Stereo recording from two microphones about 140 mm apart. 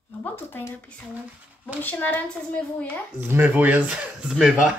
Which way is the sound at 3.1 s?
15° right (ahead or behind).